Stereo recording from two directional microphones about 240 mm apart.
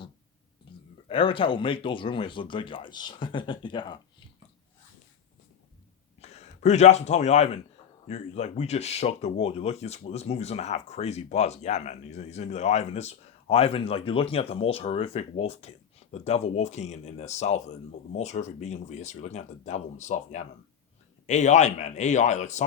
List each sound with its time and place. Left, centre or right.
1.0 s speech: left
6.2 s speech: left